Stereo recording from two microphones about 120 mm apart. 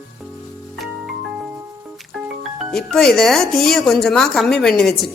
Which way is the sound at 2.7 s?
5° left (ahead or behind).